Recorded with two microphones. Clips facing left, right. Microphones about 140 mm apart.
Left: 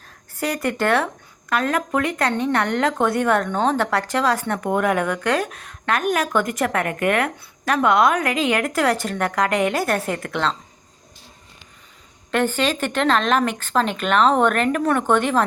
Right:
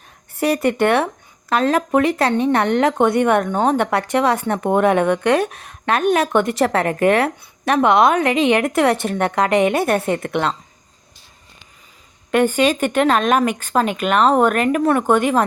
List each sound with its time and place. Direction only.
0.3 s speech: 25° right (ahead or behind)
3.8 s speech: 25° right (ahead or behind)
12.3 s speech: 15° right (ahead or behind)